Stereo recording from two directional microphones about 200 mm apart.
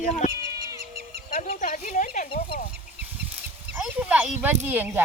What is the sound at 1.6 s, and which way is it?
Speech, 40° left (ahead or behind).